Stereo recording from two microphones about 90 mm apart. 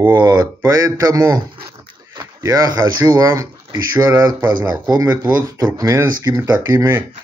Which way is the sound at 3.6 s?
50° right (ahead or behind).